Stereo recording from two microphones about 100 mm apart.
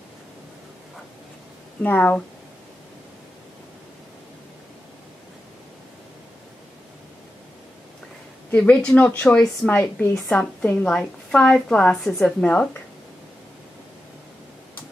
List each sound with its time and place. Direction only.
1.8 s a woman's voice: 15° left (ahead or behind)
8.5 s a woman's voice: 15° left (ahead or behind)